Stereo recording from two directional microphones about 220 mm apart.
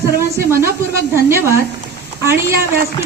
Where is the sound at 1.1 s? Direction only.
10° right (ahead or behind).